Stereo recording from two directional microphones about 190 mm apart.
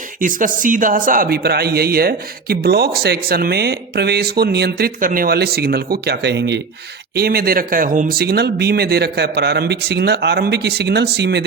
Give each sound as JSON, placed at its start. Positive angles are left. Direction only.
{"t": 0.2, "sound": "speech", "side_deg": -45}
{"t": 7.2, "sound": "speech", "side_deg": -55}